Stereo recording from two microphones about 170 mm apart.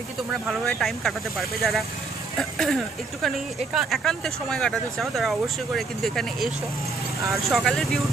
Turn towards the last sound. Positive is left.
turn(degrees=0)  # may be behind; listen again after turning